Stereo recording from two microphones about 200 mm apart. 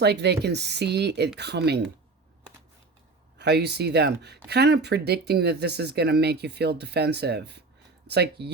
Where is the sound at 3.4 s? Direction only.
55° right (ahead or behind).